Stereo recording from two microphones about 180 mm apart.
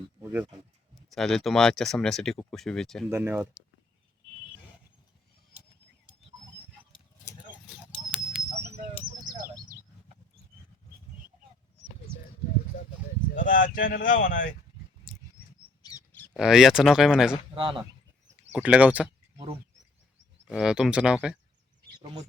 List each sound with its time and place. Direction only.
0.2 s a sound: 10° right (ahead or behind)
1.1 s speech: centre (ahead or behind)
3.1 s speech: 15° right (ahead or behind)
7.7 s a sound: 5° right (ahead or behind)
13.3 s speech: 45° left (ahead or behind)
15.1 s patter: centre (ahead or behind)
15.8 s bird: 20° left (ahead or behind)
16.3 s speech: centre (ahead or behind)
17.5 s a man's voice: 30° right (ahead or behind)
18.5 s speech: 5° right (ahead or behind)
20.5 s speech: 5° right (ahead or behind)